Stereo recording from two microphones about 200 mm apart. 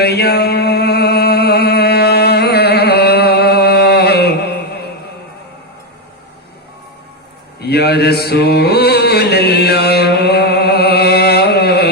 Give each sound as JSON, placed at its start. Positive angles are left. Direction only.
{"t": 0.0, "sound": "mantra", "side_deg": 55}
{"t": 7.6, "sound": "mantra", "side_deg": 55}